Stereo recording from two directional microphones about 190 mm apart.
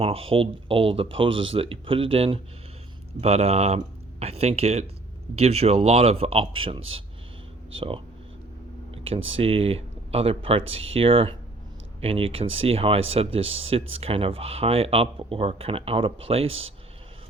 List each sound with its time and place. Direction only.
0.0 s speech: 30° right (ahead or behind)